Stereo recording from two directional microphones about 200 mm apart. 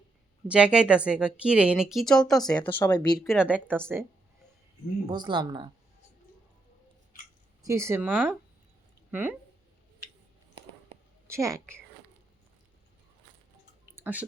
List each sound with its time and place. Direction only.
0.4 s speech: 5° right (ahead or behind)
2.4 s speech: 20° left (ahead or behind)
3.2 s a woman's voice: 5° right (ahead or behind)
5.0 s speech: 20° right (ahead or behind)
7.6 s a woman's voice: 15° right (ahead or behind)
11.3 s a woman's voice: 15° right (ahead or behind)
13.9 s a sound: 10° right (ahead or behind)